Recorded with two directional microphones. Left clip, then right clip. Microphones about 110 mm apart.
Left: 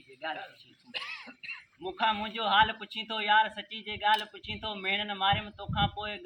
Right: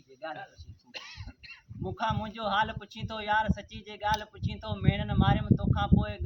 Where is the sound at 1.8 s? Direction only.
30° right (ahead or behind).